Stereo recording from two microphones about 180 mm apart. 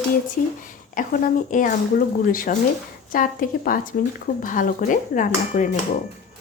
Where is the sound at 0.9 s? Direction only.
45° left (ahead or behind).